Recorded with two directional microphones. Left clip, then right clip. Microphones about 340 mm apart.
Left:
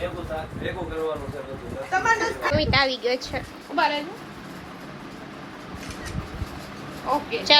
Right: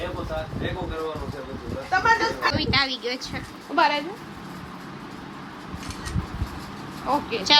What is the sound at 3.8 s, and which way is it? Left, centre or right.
Speech, right.